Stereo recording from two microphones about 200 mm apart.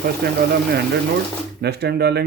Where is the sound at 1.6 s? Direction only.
55° right (ahead or behind).